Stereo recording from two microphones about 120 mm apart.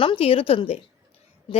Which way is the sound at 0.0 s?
50° left (ahead or behind).